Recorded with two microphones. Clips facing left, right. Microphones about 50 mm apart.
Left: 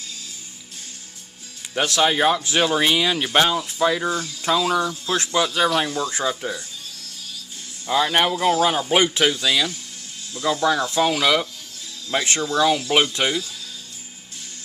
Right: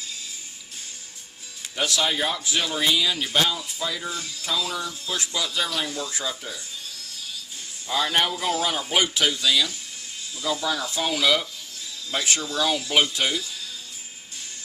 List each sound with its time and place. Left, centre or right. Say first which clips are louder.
1.7 s speech: left 5 dB; left
7.9 s speech: left 4 dB; left
10.3 s speech: left 6 dB; left
11.0 s speech: left 2 dB; left
12.1 s speech: left 4 dB; left
12.5 s speech: left 5 dB; left